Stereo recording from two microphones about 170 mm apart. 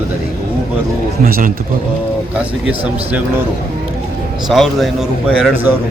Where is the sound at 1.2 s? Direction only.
60° right (ahead or behind).